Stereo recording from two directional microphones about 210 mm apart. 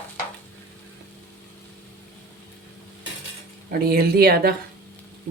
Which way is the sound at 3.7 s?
45° right (ahead or behind).